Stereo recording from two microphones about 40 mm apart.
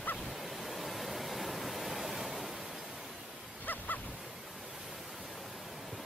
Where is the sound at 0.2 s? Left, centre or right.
Centre.